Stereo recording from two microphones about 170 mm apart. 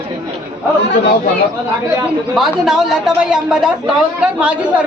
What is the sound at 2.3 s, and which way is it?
A man's voice, centre (ahead or behind).